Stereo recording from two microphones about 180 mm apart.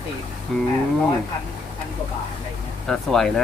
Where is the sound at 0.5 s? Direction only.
Centre (ahead or behind).